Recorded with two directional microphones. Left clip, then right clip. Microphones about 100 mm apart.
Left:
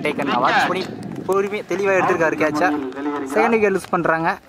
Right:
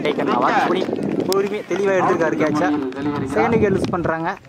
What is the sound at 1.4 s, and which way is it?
Speech, 20° left (ahead or behind).